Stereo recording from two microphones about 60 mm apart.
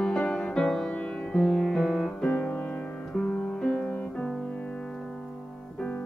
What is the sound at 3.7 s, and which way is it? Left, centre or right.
Music, left.